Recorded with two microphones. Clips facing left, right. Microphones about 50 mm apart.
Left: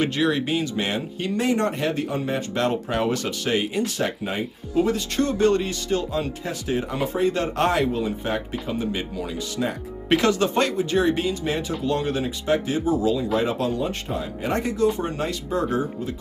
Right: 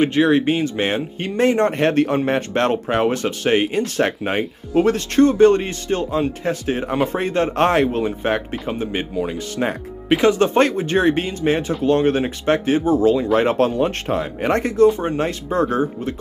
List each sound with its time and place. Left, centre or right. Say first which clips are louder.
0.0 s speech: right 7 dB; right
1.8 s speech: right 8 dB; right
5.1 s speech: right 9 dB; right
10.0 s speech: right 4 dB; centre
10.4 s speech: right 5 dB; right